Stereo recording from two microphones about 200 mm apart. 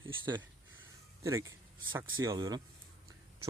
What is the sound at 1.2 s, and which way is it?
Speech, 15° right (ahead or behind).